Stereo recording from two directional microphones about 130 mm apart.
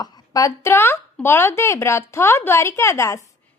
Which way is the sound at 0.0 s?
25° left (ahead or behind).